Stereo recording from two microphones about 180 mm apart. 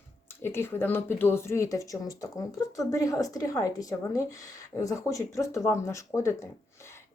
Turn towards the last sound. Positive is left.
turn(degrees=15)  # may be behind; listen again after turning